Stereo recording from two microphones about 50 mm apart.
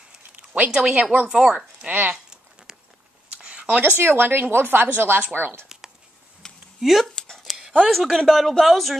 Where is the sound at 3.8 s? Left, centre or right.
Right.